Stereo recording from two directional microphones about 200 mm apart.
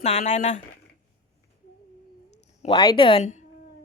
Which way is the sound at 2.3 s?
30° left (ahead or behind).